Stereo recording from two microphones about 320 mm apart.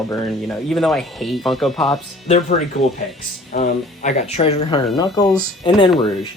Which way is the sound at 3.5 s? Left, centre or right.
Left.